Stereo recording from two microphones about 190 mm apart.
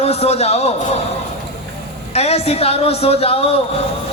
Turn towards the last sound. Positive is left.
turn(degrees=30)  # may be behind; listen again after turning